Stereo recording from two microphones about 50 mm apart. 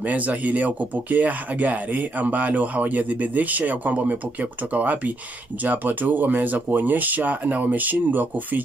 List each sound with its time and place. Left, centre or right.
0.0 s speech: right